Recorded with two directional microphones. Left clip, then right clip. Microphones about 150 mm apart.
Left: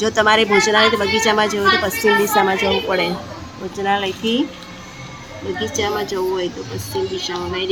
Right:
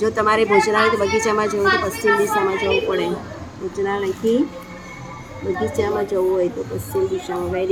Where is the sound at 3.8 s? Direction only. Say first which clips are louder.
Left 4 dB; 20° left (ahead or behind).